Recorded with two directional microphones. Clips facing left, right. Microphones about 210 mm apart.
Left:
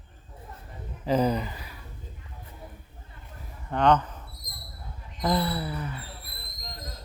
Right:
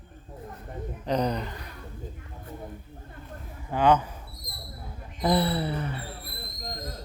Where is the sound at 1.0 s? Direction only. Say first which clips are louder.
Left 3 dB; 5° left (ahead or behind).